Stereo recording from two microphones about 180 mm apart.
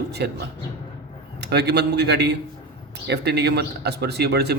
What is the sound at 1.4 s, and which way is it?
Speech, 65° right (ahead or behind).